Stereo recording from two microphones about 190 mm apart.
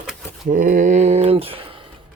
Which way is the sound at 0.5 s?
45° right (ahead or behind).